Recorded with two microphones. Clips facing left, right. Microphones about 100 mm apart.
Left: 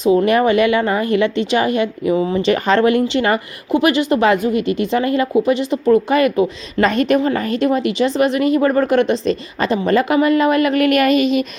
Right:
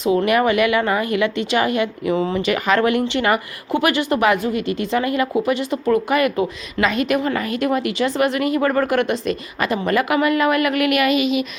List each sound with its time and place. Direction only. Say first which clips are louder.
0.3 s a woman's voice: left 3 dB; 30° left (ahead or behind)
6.7 s a woman's voice: left 4 dB; 35° left (ahead or behind)